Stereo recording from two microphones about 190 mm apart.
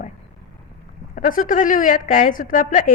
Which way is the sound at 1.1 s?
45° left (ahead or behind).